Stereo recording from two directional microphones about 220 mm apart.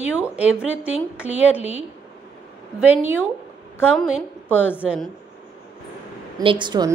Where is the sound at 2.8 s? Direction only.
10° right (ahead or behind).